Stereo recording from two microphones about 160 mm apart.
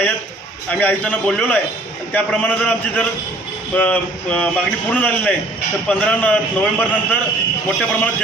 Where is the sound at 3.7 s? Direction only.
10° left (ahead or behind).